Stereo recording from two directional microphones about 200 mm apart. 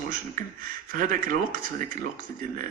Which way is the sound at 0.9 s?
45° right (ahead or behind).